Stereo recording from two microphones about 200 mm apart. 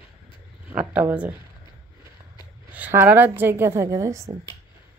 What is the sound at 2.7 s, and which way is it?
A woman's voice, 10° right (ahead or behind).